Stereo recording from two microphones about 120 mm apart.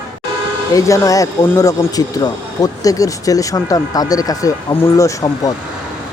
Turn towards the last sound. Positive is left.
turn(degrees=30)  # may be behind; listen again after turning